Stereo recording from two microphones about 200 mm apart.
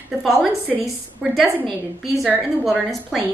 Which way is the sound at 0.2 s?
Centre (ahead or behind).